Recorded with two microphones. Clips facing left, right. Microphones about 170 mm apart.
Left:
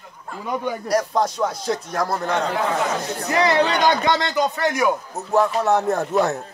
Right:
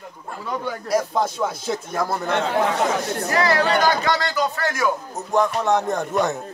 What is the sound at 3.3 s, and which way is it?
Speech, 20° left (ahead or behind).